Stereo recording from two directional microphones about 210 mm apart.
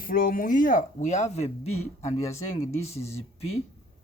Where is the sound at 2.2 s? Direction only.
15° left (ahead or behind).